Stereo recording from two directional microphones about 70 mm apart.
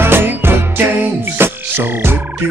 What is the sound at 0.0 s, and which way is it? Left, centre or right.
Music, right.